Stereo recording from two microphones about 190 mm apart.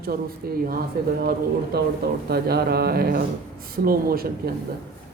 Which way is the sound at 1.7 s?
55° right (ahead or behind).